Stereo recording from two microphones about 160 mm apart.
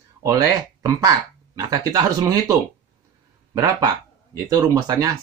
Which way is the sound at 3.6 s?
25° right (ahead or behind).